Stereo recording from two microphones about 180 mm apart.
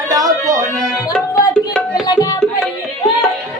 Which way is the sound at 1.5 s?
5° left (ahead or behind).